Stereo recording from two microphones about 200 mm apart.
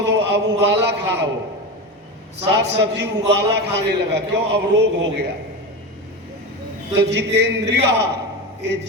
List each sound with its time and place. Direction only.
0.0 s a sound: 60° right (ahead or behind)
0.7 s a man's voice: 60° right (ahead or behind)
2.6 s a man's voice: 60° right (ahead or behind)
6.9 s a man's voice: 60° right (ahead or behind)